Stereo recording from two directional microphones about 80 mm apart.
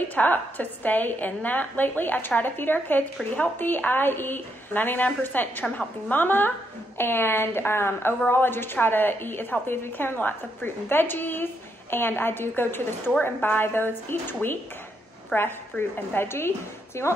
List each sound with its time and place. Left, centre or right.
0.1 s a woman's voice: left